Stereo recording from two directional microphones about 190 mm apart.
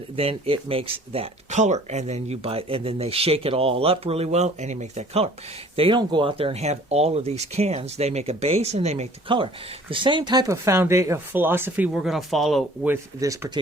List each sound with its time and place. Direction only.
0.2 s speech: 30° right (ahead or behind); by 12.9 s centre (ahead or behind)
12.9 s speech: 15° right (ahead or behind)